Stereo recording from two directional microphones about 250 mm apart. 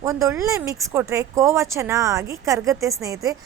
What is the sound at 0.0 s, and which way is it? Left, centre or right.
A woman's voice, centre.